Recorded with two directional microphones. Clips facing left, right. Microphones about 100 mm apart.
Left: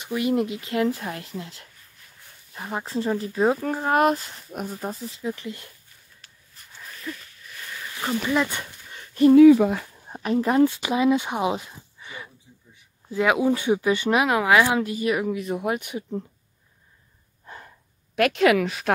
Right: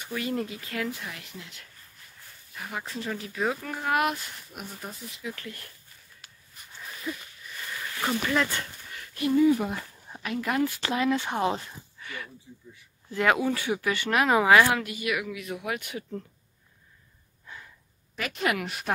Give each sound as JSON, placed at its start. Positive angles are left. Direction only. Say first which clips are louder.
{"t": 0.0, "sound": "speech", "louder": "left 7 dB", "side_deg": 20}
{"t": 0.9, "sound": "speech", "louder": "left 8 dB", "side_deg": 40}
{"t": 5.3, "sound": "speech", "louder": "left 7 dB", "side_deg": 20}
{"t": 6.2, "sound": "a sound", "louder": "right 1 dB", "side_deg": -5}
{"t": 8.3, "sound": "dog", "louder": "left 3 dB", "side_deg": 15}
{"t": 9.3, "sound": "speech", "louder": "left 9 dB", "side_deg": 90}
{"t": 10.0, "sound": "speech", "louder": "left 8 dB", "side_deg": 40}
{"t": 10.8, "sound": "speech", "louder": "left 5 dB", "side_deg": 15}
{"t": 14.2, "sound": "speech", "louder": "right 2 dB", "side_deg": 0}
{"t": 14.8, "sound": "speech", "louder": "left 7 dB", "side_deg": 35}
{"t": 15.8, "sound": "speech", "louder": "left 5 dB", "side_deg": 20}
{"t": 17.5, "sound": "a sound", "louder": "left 4 dB", "side_deg": 45}
{"t": 18.1, "sound": "a woman's voice", "louder": "left 10 dB", "side_deg": 80}